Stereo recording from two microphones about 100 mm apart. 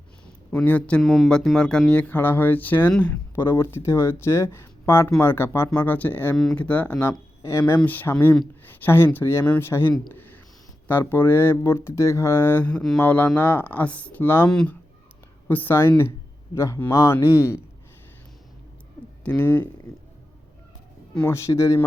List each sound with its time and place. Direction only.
0.5 s speech: 15° left (ahead or behind)
1.0 s speech: 5° right (ahead or behind); by 6.3 s 20° left (ahead or behind)
6.3 s speech: centre (ahead or behind)
6.6 s speech: 15° left (ahead or behind)
7.1 s speech: 30° left (ahead or behind)
7.9 s speech: 20° left (ahead or behind)
10.1 s a sound: 20° left (ahead or behind)
10.8 s speech: 20° left (ahead or behind)
14.5 s speech: 10° left (ahead or behind)
15.4 s speech: 20° left (ahead or behind)
19.2 s speech: 15° left (ahead or behind)
21.2 s speech: 25° left (ahead or behind)